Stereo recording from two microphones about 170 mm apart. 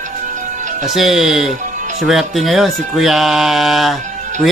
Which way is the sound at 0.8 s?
Centre (ahead or behind).